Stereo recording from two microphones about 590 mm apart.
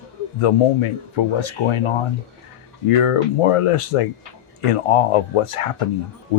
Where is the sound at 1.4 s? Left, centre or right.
Left.